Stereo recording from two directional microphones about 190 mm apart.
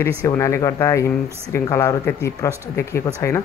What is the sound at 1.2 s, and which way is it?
Speech, 15° right (ahead or behind).